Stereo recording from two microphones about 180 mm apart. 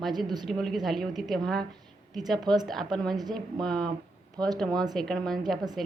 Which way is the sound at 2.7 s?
Centre (ahead or behind).